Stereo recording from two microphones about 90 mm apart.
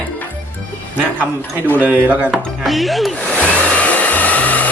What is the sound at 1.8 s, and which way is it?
Speech, 15° right (ahead or behind).